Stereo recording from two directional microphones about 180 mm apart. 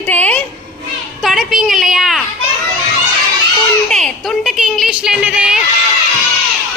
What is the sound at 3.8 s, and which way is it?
A woman's voice, 5° left (ahead or behind).